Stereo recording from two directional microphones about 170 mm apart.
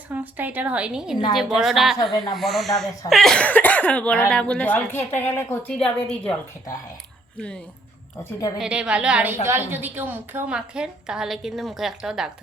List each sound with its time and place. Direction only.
0.1 s a woman's voice: 10° right (ahead or behind); by 6.3 s 5° left (ahead or behind)
8.2 s a woman's voice: 20° left (ahead or behind)
8.5 s a woman's voice: 5° right (ahead or behind)